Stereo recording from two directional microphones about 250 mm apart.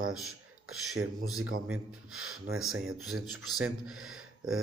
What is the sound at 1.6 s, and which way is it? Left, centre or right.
Speech, centre.